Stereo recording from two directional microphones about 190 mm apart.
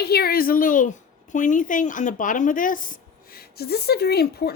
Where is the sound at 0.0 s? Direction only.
55° left (ahead or behind).